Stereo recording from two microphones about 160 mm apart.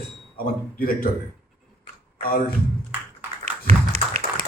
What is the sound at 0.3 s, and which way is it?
Speech, 65° left (ahead or behind).